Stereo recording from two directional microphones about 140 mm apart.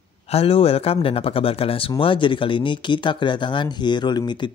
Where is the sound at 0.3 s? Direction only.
45° left (ahead or behind).